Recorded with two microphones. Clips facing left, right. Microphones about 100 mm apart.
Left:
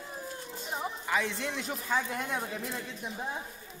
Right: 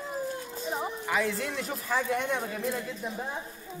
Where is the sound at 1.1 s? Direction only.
Centre (ahead or behind).